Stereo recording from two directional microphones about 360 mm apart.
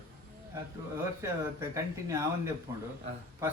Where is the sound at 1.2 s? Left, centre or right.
Centre.